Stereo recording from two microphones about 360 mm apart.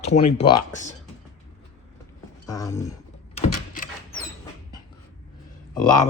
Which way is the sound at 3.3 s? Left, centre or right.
Centre.